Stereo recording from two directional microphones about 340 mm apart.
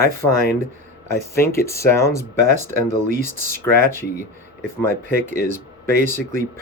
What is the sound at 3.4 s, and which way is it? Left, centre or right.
Speech, centre.